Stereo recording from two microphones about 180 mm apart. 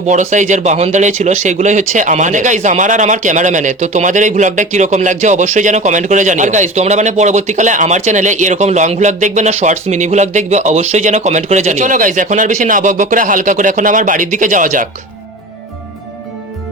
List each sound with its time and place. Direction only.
0.1 s speech: 45° right (ahead or behind)